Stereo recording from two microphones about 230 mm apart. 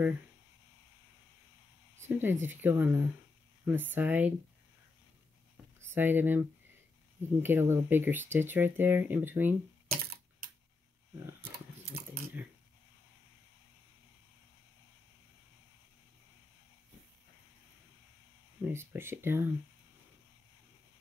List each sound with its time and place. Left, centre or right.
2.0 s speech: centre
5.8 s speech: centre
18.7 s speech: centre